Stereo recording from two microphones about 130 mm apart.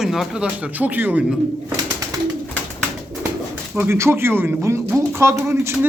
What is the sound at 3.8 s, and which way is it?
Speech, 20° right (ahead or behind).